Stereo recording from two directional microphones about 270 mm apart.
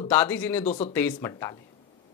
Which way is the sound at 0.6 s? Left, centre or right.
Left.